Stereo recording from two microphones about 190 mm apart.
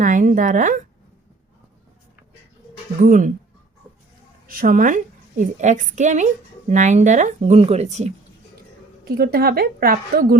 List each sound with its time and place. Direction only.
0.0 s a woman's voice: 45° right (ahead or behind)
3.0 s a woman's voice: 45° right (ahead or behind)
4.4 s a woman's voice: 45° right (ahead or behind)
9.0 s a woman's voice: 50° right (ahead or behind)